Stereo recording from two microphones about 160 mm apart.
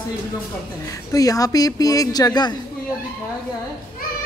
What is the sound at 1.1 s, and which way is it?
Speech, 20° left (ahead or behind).